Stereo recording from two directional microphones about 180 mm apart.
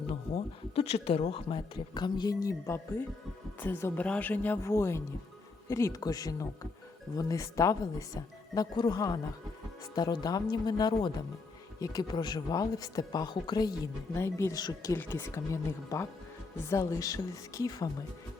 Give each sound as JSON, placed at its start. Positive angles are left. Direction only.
{"t": 0.1, "sound": "speech", "side_deg": 35}